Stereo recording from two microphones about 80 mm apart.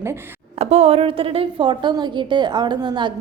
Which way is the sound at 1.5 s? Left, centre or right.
Right.